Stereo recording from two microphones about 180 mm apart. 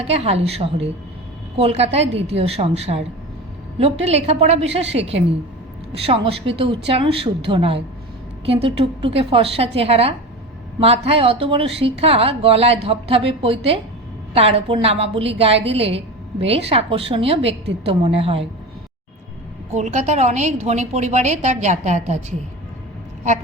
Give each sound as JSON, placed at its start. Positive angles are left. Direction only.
{"t": 0.0, "sound": "a woman's voice", "side_deg": -35}
{"t": 19.7, "sound": "a woman's voice", "side_deg": -40}